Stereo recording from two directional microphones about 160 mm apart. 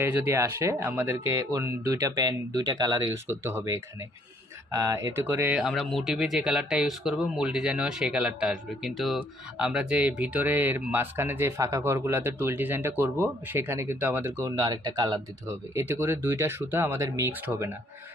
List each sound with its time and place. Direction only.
0.0 s speech: 15° right (ahead or behind)